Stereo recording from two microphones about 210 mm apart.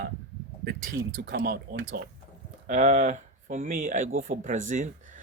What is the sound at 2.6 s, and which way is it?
A man's voice, 35° right (ahead or behind).